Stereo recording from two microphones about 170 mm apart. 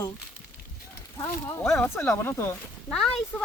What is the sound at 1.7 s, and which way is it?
Speech, 15° left (ahead or behind).